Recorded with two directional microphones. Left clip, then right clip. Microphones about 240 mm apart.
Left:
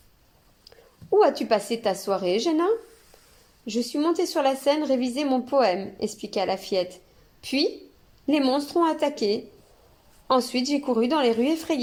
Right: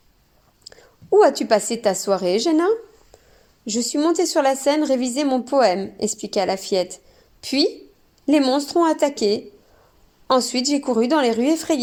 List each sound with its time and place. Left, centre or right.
0.6 s a woman's voice: right